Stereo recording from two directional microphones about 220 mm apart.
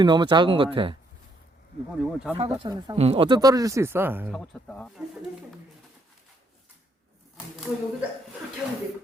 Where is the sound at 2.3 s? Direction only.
20° right (ahead or behind).